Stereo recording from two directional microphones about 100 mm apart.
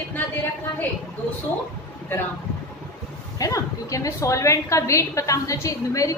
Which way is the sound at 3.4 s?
35° left (ahead or behind).